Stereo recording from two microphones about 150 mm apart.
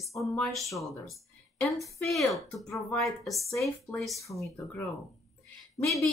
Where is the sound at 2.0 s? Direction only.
Centre (ahead or behind).